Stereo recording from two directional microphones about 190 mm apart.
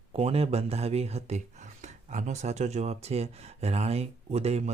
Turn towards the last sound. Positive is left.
turn(degrees=-35)  # may be behind; listen again after turning